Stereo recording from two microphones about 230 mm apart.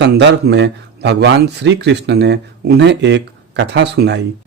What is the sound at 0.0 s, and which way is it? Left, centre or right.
Speech, right.